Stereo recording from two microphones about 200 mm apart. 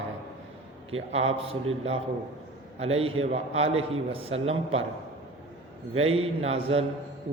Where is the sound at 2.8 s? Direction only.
30° right (ahead or behind).